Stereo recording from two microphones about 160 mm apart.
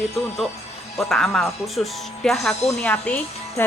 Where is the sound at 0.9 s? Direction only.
Centre (ahead or behind).